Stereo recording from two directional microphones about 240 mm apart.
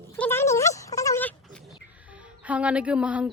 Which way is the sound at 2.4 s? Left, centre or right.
Centre.